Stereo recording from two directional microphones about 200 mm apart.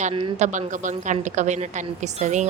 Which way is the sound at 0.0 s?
30° right (ahead or behind).